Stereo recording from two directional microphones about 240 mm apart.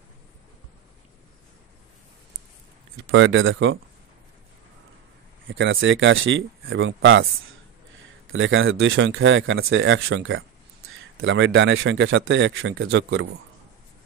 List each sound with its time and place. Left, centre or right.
3.1 s speech: right
5.5 s speech: right
8.3 s speech: right